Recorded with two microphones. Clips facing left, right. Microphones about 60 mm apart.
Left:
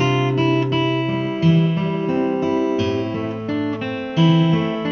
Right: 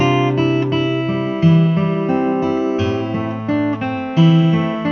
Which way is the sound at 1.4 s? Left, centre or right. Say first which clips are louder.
Right 4 dB; right.